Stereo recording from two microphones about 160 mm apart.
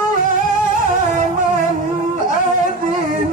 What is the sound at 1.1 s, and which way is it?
Music, 55° right (ahead or behind).